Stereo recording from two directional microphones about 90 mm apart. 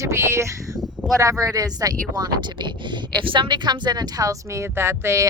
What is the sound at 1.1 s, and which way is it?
Speech, 40° right (ahead or behind).